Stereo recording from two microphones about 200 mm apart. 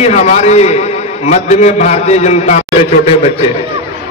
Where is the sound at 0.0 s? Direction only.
35° left (ahead or behind).